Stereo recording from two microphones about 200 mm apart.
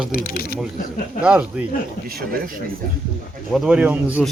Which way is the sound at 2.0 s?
50° right (ahead or behind).